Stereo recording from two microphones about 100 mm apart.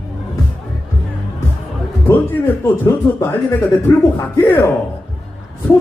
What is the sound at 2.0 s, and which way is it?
Speech, 20° left (ahead or behind).